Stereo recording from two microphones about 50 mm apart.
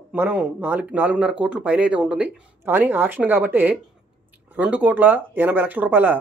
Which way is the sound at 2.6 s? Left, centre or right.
Right.